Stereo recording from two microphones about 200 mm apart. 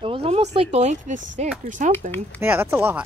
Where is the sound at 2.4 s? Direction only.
10° right (ahead or behind).